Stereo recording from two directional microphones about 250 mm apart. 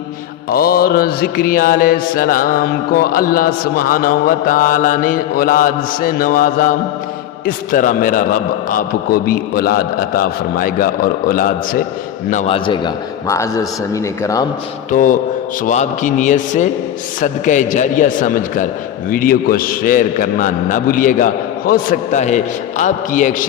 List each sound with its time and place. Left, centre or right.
0.5 s mantra: left
12.3 s a man's voice: left
14.8 s mantra: left
15.6 s a man's voice: left
17.2 s mantra: left